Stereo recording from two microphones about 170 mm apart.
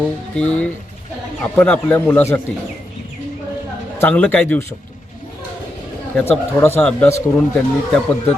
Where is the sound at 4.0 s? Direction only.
10° left (ahead or behind).